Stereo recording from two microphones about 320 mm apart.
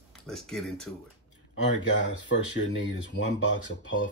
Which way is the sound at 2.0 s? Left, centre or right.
Left.